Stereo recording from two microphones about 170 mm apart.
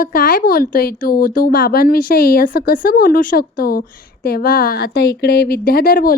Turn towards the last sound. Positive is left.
turn(degrees=55)  # may be behind; listen again after turning